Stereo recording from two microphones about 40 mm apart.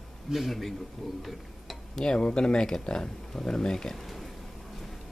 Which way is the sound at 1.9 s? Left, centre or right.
Left.